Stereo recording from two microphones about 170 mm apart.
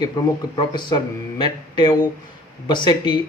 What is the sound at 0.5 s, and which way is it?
Speech, 25° left (ahead or behind).